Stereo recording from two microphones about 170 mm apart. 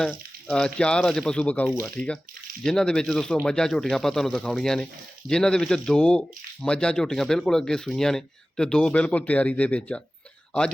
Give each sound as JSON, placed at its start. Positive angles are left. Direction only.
{"t": 0.0, "sound": "speech", "side_deg": 0}